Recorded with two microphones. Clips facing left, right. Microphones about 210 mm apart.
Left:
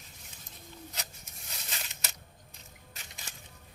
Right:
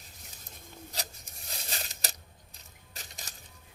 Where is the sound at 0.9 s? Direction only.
35° right (ahead or behind).